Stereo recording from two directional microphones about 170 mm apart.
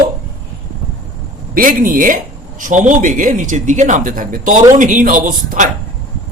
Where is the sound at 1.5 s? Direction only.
55° right (ahead or behind).